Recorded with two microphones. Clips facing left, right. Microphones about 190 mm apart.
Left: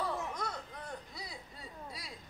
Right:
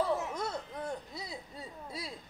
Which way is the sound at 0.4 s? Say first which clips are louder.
Right 5 dB; 25° right (ahead or behind).